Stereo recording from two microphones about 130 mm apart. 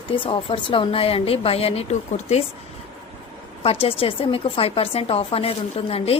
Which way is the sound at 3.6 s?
45° left (ahead or behind).